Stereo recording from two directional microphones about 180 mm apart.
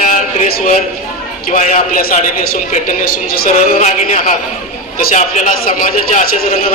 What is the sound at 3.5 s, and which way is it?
A man's voice, 40° left (ahead or behind).